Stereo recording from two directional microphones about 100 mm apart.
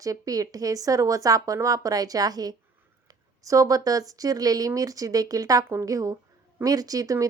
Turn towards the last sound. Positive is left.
turn(degrees=-35)  # may be behind; listen again after turning